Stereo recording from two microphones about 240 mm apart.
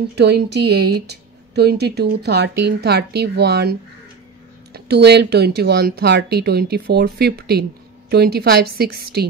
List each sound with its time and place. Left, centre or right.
0.1 s speech: right
4.7 s a woman's voice: right